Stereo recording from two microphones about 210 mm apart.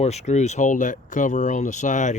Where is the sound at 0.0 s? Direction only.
30° left (ahead or behind).